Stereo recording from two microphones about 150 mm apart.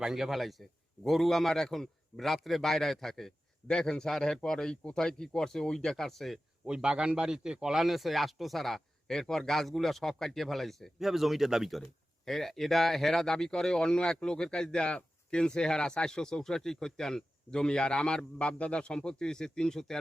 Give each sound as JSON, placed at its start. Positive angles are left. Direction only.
{"t": 0.0, "sound": "a man's voice", "side_deg": 0}